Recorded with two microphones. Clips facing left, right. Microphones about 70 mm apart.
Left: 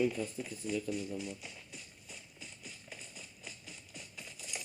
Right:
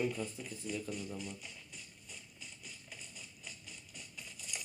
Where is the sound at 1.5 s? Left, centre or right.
Left.